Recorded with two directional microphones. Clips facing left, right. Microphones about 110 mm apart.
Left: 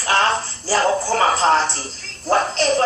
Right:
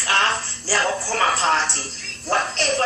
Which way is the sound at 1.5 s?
45° left (ahead or behind).